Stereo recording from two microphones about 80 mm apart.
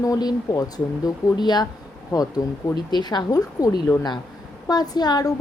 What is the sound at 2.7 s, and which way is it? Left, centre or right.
A woman's voice, left.